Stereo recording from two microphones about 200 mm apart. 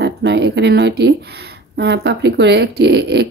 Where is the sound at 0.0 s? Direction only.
60° right (ahead or behind).